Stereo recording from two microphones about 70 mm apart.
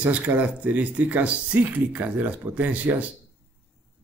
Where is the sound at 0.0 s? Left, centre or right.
Right.